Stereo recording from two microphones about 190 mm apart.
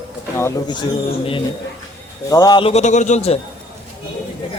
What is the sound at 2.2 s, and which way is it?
A man's voice, 20° left (ahead or behind).